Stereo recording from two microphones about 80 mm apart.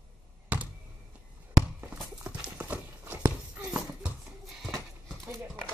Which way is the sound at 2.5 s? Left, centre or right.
Right.